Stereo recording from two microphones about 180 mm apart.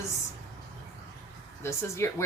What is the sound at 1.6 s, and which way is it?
Speech, 15° left (ahead or behind).